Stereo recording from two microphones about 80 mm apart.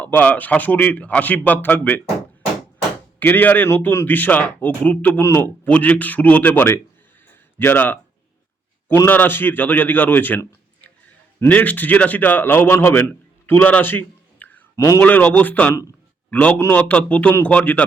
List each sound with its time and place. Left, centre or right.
0.0 s a man's voice: centre
3.2 s a man's voice: left
5.2 s a man's voice: left
5.6 s a man's voice: centre
7.3 s a sound: left
9.0 s a man's voice: left
13.5 s a sound: left
15.0 s a man's voice: centre